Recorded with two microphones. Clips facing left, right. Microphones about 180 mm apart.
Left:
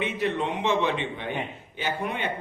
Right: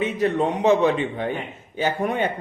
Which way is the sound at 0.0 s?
40° right (ahead or behind).